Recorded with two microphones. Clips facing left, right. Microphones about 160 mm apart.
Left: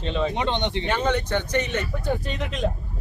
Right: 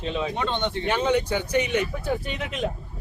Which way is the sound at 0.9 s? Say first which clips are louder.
Right 2 dB; 10° right (ahead or behind).